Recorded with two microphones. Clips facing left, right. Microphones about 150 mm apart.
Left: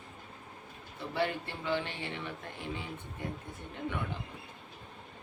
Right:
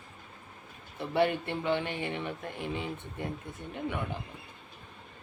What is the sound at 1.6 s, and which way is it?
Speech, 15° right (ahead or behind).